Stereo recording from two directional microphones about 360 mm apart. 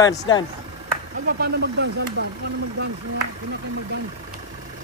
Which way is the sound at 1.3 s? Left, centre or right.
Right.